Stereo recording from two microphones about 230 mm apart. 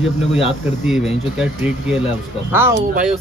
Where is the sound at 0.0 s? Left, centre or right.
Centre.